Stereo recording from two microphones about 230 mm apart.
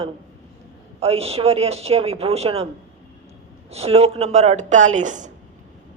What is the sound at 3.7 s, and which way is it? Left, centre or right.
A woman's voice, right.